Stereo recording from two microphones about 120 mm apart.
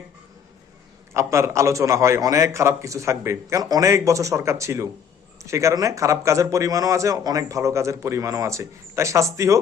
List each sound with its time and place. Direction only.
1.1 s a man's voice: 25° right (ahead or behind)